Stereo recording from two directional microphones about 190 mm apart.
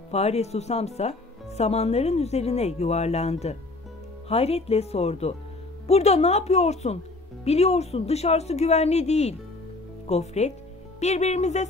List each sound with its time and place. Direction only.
0.1 s speech: 35° left (ahead or behind)